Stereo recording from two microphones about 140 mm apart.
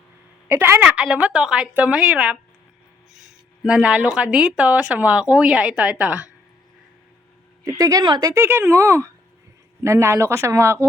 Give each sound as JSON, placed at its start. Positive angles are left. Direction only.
{"t": 0.4, "sound": "speech", "side_deg": -15}
{"t": 7.6, "sound": "a woman's voice", "side_deg": -25}